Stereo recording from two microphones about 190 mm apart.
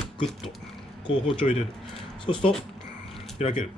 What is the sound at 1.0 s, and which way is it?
Speech, 30° left (ahead or behind).